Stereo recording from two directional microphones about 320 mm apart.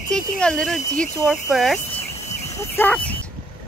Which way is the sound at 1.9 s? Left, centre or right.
Centre.